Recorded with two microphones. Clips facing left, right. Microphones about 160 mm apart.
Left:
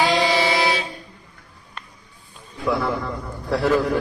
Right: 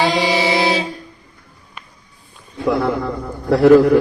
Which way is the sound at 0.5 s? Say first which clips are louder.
Right 4 dB; 30° right (ahead or behind).